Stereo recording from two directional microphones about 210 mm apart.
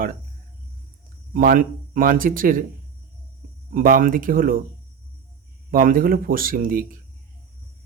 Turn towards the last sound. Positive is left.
turn(degrees=-45)  # may be behind; listen again after turning